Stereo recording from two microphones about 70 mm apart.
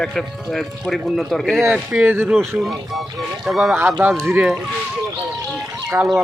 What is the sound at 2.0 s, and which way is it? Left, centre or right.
Speech, right.